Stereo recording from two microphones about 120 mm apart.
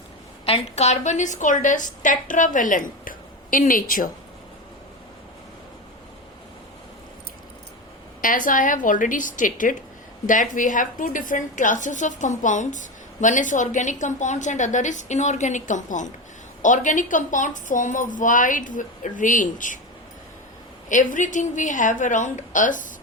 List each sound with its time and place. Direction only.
0.4 s a woman's voice: 60° left (ahead or behind); by 2.9 s 90° left
8.2 s a woman's voice: 90° left
20.9 s a woman's voice: 90° left